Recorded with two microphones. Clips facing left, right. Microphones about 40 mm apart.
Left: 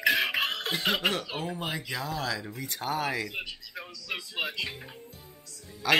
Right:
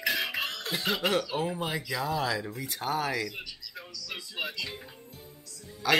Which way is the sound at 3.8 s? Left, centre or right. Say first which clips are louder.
Left 4 dB; left.